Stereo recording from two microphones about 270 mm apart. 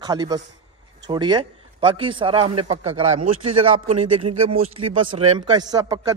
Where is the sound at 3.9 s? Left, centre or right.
Right.